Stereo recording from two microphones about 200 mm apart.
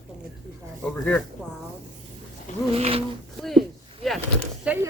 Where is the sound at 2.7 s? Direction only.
30° right (ahead or behind).